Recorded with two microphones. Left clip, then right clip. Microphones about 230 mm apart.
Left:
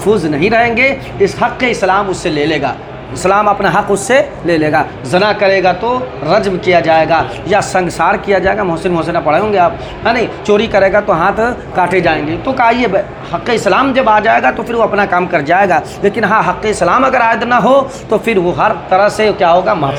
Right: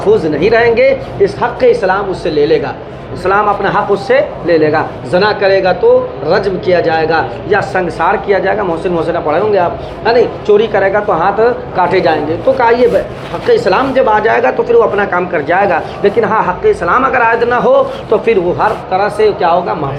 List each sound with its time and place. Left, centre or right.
0.0 s a man's voice: left